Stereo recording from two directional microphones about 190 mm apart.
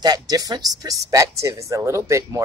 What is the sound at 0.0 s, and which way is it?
Speech, 20° right (ahead or behind).